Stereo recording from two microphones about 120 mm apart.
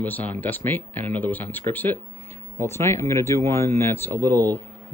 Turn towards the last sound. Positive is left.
turn(degrees=15)  # may be behind; listen again after turning